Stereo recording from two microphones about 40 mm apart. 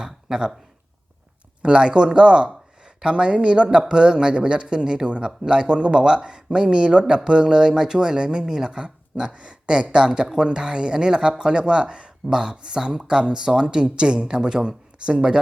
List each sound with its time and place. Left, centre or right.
0.0 s speech: centre
1.6 s speech: right